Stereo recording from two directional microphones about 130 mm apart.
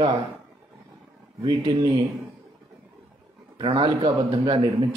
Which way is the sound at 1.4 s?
35° right (ahead or behind).